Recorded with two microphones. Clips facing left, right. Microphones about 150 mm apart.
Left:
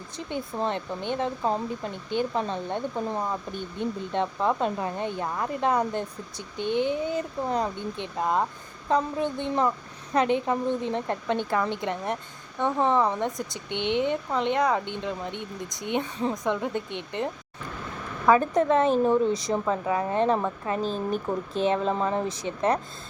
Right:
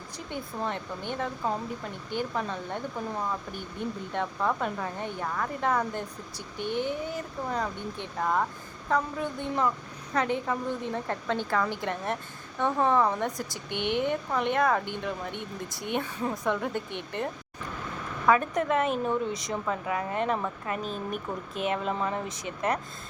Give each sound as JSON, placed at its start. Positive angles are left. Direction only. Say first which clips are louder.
{"t": 0.3, "sound": "speech", "louder": "left 4 dB", "side_deg": 20}
{"t": 18.3, "sound": "speech", "louder": "left 4 dB", "side_deg": 30}